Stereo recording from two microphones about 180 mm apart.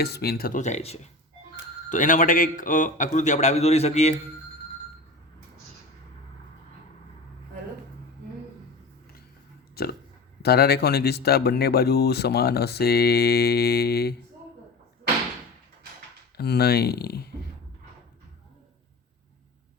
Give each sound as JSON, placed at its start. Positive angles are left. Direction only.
{"t": 0.0, "sound": "a man's voice", "side_deg": 60}
{"t": 9.8, "sound": "speech", "side_deg": 60}
{"t": 16.4, "sound": "speech", "side_deg": 60}